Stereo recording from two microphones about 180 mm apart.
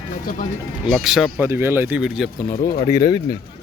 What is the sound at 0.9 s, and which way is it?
A man's voice, centre (ahead or behind).